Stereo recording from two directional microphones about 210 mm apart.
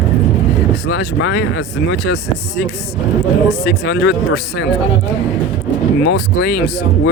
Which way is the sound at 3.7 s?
60° left (ahead or behind).